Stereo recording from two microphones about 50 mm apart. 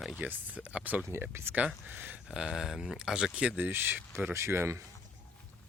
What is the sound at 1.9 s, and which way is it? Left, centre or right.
Speech, right.